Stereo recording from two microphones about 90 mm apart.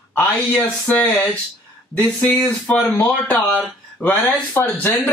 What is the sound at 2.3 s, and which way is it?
Speech, 20° left (ahead or behind).